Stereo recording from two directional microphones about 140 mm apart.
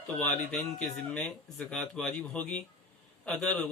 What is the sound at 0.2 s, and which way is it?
A man's voice, 5° left (ahead or behind).